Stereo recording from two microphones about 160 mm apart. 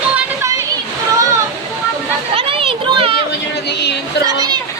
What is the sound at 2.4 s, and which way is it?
Children playing, 35° right (ahead or behind).